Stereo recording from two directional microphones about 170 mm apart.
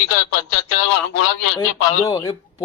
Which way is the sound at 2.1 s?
20° left (ahead or behind).